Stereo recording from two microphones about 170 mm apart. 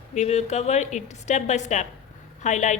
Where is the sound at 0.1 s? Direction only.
40° left (ahead or behind).